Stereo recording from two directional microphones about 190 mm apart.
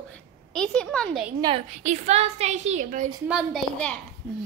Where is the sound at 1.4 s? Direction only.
25° right (ahead or behind).